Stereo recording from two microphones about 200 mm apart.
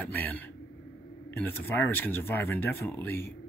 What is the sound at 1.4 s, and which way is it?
Speech, 10° left (ahead or behind).